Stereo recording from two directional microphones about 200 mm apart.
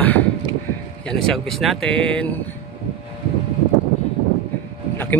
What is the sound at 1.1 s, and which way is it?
Speech, centre (ahead or behind).